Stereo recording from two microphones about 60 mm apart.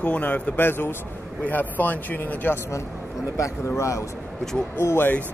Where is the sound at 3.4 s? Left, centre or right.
Left.